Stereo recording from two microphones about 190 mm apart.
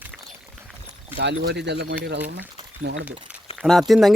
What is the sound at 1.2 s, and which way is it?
Speech, 65° right (ahead or behind).